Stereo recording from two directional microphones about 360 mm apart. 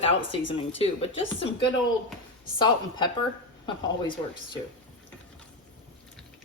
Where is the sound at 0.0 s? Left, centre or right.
Centre.